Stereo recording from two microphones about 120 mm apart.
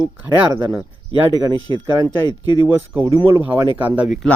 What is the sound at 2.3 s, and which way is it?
Speech, 35° left (ahead or behind).